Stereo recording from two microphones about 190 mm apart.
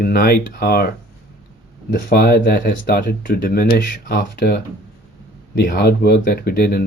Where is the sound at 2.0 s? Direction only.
55° left (ahead or behind).